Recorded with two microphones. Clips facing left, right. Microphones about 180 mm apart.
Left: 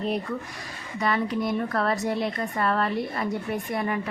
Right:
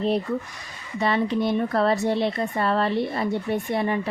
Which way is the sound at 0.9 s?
25° right (ahead or behind).